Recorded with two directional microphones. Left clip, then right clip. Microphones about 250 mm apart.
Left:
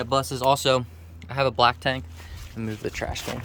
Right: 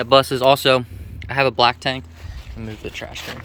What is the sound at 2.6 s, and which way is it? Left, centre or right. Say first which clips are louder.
Speech: left 1 dB; centre.